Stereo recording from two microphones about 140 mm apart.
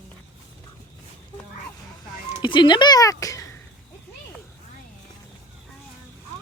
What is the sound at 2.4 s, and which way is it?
Speech, 35° left (ahead or behind).